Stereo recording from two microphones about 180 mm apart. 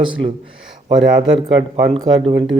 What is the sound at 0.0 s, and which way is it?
Speech, 30° right (ahead or behind).